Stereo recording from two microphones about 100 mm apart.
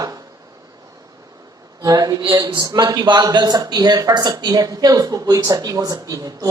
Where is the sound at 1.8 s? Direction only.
35° right (ahead or behind).